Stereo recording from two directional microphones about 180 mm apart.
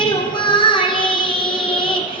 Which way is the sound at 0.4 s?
25° left (ahead or behind).